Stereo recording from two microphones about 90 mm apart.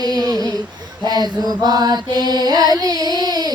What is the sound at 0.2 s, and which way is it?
Humming, 45° right (ahead or behind).